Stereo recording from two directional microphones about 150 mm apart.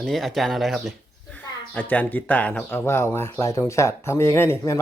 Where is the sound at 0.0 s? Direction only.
Centre (ahead or behind).